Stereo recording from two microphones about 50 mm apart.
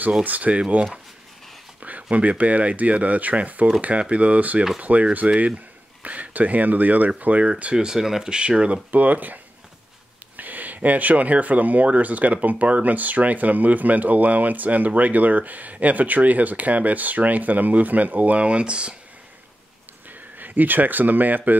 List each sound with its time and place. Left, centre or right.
0.2 s speech: right
7.7 s speech: centre
8.9 s speech: right
20.1 s speech: right